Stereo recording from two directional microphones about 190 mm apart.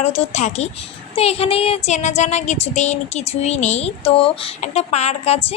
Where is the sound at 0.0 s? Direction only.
35° left (ahead or behind).